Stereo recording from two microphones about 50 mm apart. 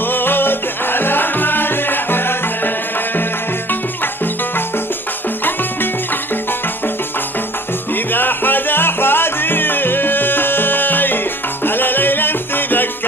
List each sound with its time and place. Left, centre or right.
0.1 s music: left
7.9 s music: left